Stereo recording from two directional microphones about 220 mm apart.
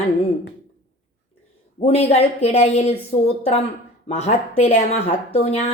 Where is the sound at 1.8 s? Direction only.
25° left (ahead or behind).